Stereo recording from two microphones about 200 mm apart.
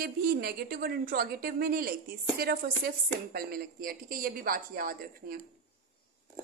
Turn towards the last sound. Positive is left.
turn(degrees=-45)  # may be behind; listen again after turning